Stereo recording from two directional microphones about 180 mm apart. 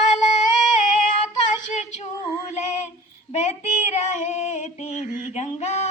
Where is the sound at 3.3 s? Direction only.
35° left (ahead or behind).